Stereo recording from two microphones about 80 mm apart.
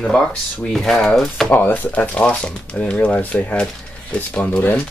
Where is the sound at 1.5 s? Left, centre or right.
Left.